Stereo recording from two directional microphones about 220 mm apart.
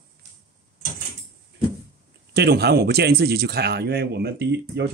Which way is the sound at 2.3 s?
45° right (ahead or behind).